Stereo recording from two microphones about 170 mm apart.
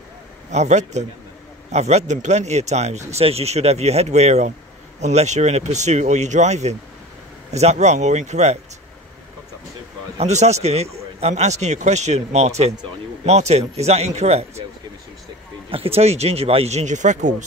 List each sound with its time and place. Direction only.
0.5 s speech: 40° right (ahead or behind)
10.1 s speech: 40° right (ahead or behind)
15.7 s speech: 35° right (ahead or behind)